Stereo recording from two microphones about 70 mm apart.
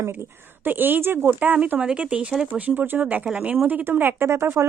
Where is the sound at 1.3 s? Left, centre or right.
Right.